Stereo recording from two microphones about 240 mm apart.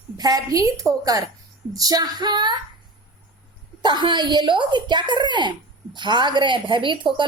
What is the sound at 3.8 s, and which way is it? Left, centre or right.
A woman's voice, centre.